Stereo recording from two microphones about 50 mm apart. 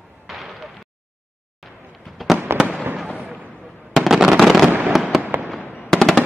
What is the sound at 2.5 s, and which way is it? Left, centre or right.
Fireworks, right.